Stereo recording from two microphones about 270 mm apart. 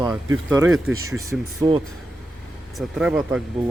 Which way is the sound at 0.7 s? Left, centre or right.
Right.